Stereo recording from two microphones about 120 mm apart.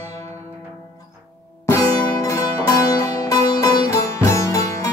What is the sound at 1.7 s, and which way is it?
Music, 25° left (ahead or behind).